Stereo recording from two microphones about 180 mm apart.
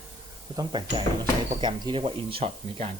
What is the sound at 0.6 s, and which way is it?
Speech, 25° right (ahead or behind).